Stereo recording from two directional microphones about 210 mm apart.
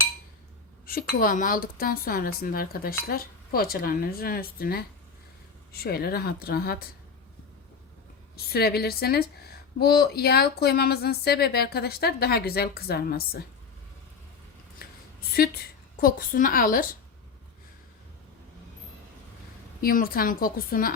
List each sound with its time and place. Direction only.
0.9 s speech: 45° left (ahead or behind)
8.5 s speech: 50° left (ahead or behind)
15.3 s a woman's voice: 45° left (ahead or behind)
19.8 s speech: 45° left (ahead or behind)